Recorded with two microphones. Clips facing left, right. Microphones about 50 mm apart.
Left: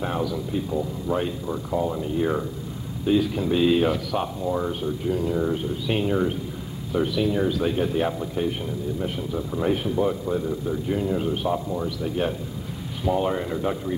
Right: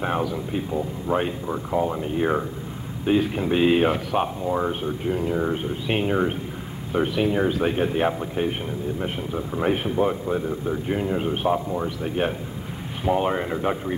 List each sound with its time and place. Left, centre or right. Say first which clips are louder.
0.0 s speech: right 1 dB; right